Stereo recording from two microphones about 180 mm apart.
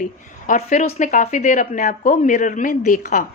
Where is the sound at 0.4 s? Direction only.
45° left (ahead or behind).